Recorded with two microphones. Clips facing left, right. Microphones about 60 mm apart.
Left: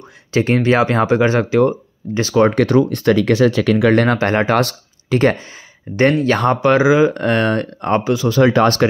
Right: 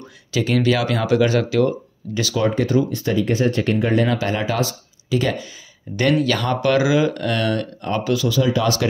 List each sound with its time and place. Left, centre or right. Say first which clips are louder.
0.3 s speech: left 4 dB; left
2.1 s speech: left 7 dB; left
2.5 s speech: left 5 dB; left
4.2 s speech: left 6 dB; left
8.0 s speech: left 2 dB; left
8.3 s speech: left 9 dB; left